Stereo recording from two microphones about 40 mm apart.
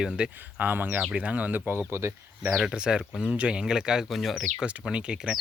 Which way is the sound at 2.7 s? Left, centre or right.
Right.